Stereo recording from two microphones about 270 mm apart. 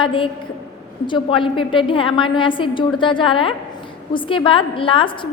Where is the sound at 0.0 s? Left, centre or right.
Centre.